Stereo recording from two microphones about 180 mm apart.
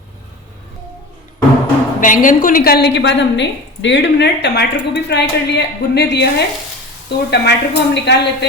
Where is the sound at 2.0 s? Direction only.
45° left (ahead or behind).